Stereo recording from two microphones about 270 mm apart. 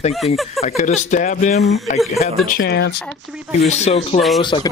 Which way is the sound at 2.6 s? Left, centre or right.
Left.